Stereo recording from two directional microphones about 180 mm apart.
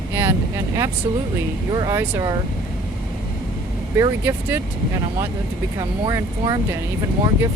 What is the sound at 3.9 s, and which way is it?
Speech, 15° right (ahead or behind).